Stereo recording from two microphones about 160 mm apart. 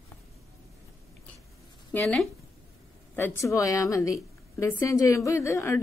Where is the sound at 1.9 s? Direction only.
5° left (ahead or behind).